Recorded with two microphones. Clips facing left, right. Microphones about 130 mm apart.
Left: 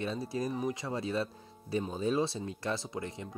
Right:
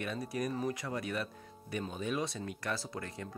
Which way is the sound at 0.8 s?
25° left (ahead or behind).